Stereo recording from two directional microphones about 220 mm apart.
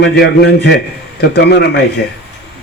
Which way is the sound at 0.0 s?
50° left (ahead or behind).